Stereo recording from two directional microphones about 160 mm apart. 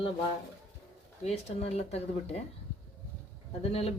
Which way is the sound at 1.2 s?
40° left (ahead or behind).